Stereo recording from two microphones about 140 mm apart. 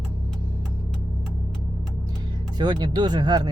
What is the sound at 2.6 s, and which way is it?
Speech, 30° right (ahead or behind).